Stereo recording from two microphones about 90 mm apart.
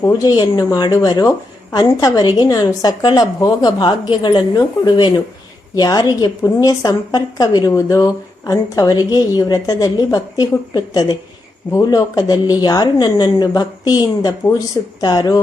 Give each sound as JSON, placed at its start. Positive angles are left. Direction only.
{"t": 0.0, "sound": "a woman's voice", "side_deg": 40}
{"t": 4.5, "sound": "a woman's voice", "side_deg": 50}